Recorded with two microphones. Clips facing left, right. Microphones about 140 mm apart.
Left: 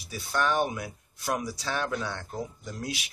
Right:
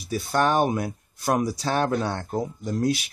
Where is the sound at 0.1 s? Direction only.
45° right (ahead or behind).